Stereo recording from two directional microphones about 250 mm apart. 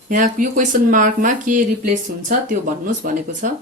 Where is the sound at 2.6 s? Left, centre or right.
Right.